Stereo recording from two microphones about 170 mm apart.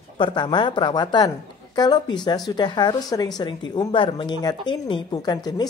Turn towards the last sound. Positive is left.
turn(degrees=25)  # may be behind; listen again after turning